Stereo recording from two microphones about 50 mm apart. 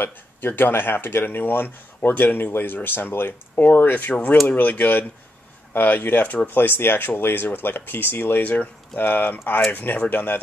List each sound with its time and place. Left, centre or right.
0.0 s speech: left
4.1 s speech: left